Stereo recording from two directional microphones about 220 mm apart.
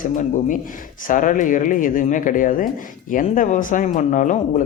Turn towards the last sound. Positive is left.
turn(degrees=35)  # may be behind; listen again after turning